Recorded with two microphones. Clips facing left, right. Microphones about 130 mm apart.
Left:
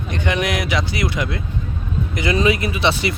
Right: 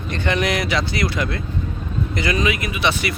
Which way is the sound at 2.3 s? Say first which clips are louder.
Left 4 dB; 30° left (ahead or behind).